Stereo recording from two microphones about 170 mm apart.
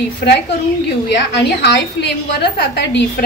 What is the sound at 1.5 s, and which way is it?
A woman's voice, 85° left.